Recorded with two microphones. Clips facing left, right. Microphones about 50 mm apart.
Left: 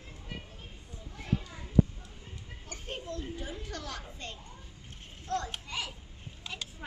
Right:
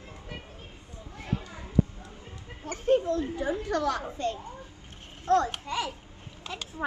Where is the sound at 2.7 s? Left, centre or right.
Right.